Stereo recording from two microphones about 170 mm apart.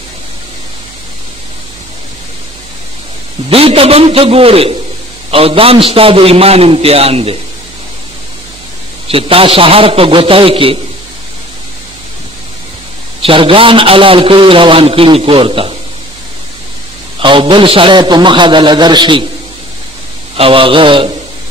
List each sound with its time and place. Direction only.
3.4 s a man's voice: 35° right (ahead or behind)
9.1 s a man's voice: 35° right (ahead or behind)
13.2 s a man's voice: 30° right (ahead or behind)
17.2 s a man's voice: 30° right (ahead or behind)
20.3 s a man's voice: 30° right (ahead or behind)